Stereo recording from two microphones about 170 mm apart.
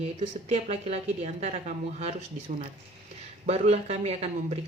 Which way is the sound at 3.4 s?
40° right (ahead or behind).